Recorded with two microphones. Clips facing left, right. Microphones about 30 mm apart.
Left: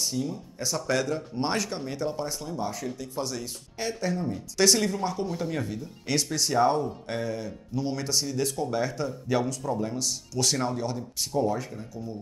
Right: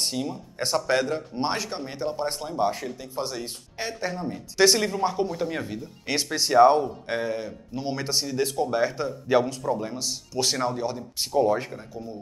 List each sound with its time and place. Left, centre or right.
0.0 s speech: right
1.4 s speech: centre
2.2 s speech: right
3.0 s speech: right
11.1 s speech: right